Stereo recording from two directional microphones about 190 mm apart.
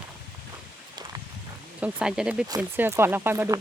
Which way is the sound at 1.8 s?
5° right (ahead or behind).